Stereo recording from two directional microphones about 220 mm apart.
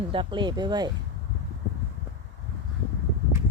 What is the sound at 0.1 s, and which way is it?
Speech, 20° right (ahead or behind).